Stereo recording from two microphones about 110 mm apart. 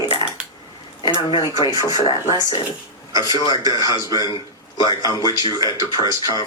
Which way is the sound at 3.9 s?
35° left (ahead or behind).